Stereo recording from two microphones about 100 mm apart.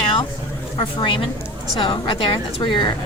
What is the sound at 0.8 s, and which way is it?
A woman's voice, 60° left (ahead or behind).